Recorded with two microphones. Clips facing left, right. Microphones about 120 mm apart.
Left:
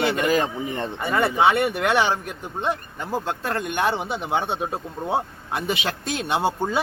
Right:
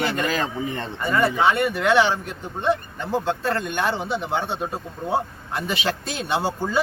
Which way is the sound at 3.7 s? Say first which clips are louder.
Even; 20° left (ahead or behind).